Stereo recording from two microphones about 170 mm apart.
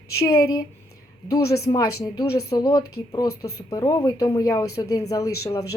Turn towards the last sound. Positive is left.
turn(degrees=20)  # may be behind; listen again after turning